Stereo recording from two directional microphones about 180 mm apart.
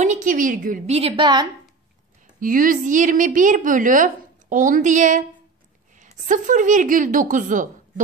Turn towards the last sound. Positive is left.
turn(degrees=-45)  # may be behind; listen again after turning